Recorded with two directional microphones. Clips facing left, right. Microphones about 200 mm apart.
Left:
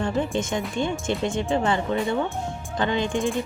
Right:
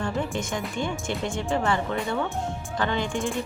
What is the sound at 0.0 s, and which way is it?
Music, 20° left (ahead or behind).